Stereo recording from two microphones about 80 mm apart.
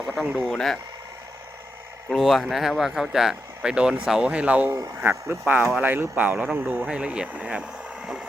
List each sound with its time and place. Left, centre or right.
0.4 s speech: centre
2.0 s speech: centre